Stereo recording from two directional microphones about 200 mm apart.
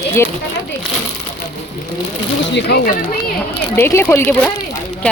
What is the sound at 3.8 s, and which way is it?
Speech, 15° left (ahead or behind).